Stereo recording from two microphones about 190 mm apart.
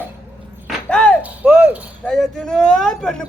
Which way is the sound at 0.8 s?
5° left (ahead or behind).